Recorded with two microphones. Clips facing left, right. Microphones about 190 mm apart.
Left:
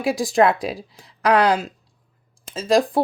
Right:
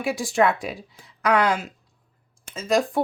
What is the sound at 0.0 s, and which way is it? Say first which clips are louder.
Speech: left 4 dB; 35° left (ahead or behind).